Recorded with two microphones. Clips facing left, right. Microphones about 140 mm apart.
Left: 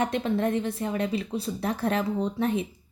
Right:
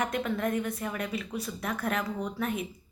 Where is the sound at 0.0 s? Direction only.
30° left (ahead or behind).